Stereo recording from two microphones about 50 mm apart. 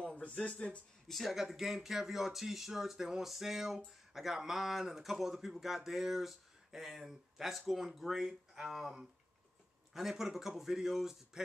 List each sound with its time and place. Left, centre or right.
0.3 s speech: left
1.0 s speech: centre
9.9 s speech: centre